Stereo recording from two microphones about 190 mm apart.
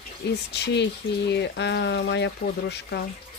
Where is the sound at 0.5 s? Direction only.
65° left (ahead or behind).